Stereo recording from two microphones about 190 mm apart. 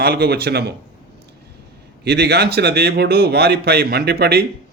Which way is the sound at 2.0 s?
60° right (ahead or behind).